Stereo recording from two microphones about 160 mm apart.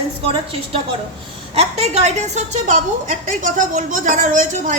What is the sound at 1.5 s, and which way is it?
A woman's voice, 40° right (ahead or behind).